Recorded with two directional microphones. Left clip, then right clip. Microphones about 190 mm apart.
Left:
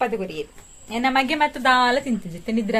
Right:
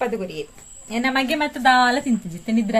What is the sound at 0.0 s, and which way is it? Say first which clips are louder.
A woman's voice: left 1 dB; 20° left (ahead or behind).